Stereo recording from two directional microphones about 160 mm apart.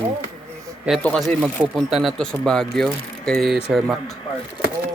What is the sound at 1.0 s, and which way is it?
Speech, 5° left (ahead or behind).